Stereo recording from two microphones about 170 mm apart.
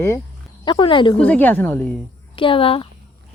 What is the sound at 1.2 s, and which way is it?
Speech, 10° left (ahead or behind).